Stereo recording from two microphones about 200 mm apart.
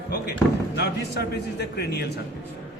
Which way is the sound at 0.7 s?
55° left (ahead or behind).